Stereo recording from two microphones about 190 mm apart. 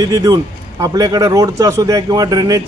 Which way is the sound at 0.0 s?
20° right (ahead or behind).